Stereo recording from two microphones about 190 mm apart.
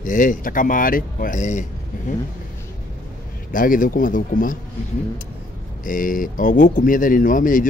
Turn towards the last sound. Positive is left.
turn(degrees=45)  # may be behind; listen again after turning